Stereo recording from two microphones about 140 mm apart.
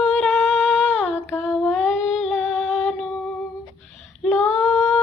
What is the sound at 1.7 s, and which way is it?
Music, centre (ahead or behind).